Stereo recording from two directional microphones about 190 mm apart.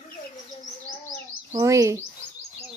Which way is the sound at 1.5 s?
15° right (ahead or behind).